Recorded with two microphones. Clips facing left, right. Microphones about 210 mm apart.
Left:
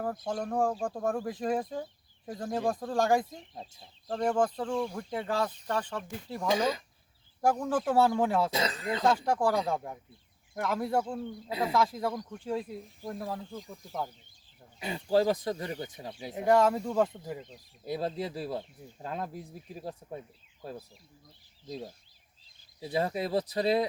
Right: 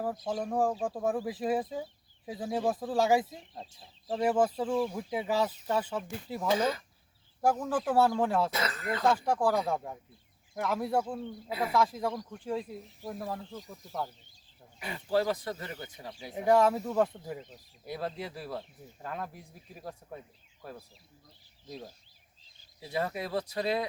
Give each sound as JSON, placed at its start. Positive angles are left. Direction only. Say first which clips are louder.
{"t": 0.0, "sound": "speech", "louder": "even", "side_deg": -5}
{"t": 6.5, "sound": "speech", "louder": "even", "side_deg": 15}
{"t": 7.4, "sound": "speech", "louder": "left 1 dB", "side_deg": -5}
{"t": 8.5, "sound": "speech", "louder": "left 2 dB", "side_deg": 25}
{"t": 9.0, "sound": "speech", "louder": "even", "side_deg": -5}
{"t": 14.8, "sound": "speech", "louder": "left 3 dB", "side_deg": 20}
{"t": 16.3, "sound": "speech", "louder": "even", "side_deg": 0}
{"t": 17.8, "sound": "speech", "louder": "left 4 dB", "side_deg": 30}
{"t": 22.9, "sound": "speech", "louder": "left 3 dB", "side_deg": 30}